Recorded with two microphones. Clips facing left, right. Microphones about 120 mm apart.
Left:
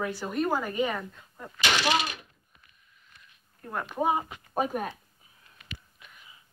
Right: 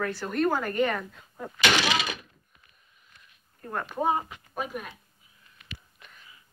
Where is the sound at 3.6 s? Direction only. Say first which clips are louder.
Even; 5° left (ahead or behind).